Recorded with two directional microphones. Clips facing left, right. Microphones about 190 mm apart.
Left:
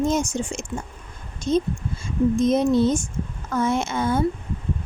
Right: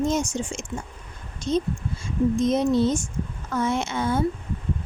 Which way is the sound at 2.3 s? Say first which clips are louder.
Left 3 dB; 50° left (ahead or behind).